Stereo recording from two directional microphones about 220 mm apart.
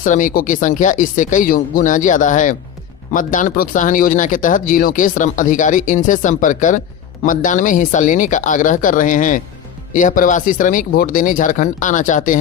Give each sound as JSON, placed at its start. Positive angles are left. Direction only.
{"t": 0.0, "sound": "speech", "side_deg": 35}